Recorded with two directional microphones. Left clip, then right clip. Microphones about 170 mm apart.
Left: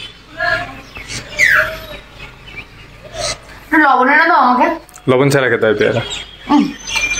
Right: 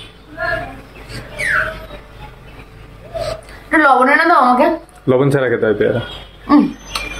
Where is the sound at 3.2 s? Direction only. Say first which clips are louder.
Left 1 dB; 35° right (ahead or behind).